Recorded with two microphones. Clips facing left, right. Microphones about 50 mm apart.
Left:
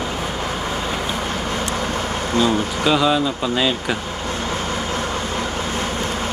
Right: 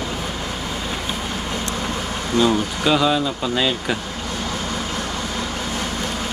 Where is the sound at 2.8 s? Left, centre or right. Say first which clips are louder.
Left 1 dB; centre.